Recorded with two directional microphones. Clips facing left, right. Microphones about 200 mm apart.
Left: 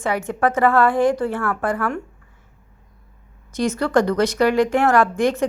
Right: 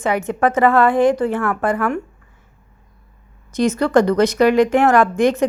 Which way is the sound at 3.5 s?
20° right (ahead or behind).